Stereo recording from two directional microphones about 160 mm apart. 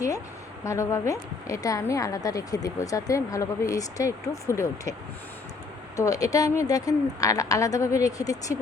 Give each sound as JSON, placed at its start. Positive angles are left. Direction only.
{"t": 0.6, "sound": "a woman's voice", "side_deg": 20}
{"t": 6.0, "sound": "a woman's voice", "side_deg": 20}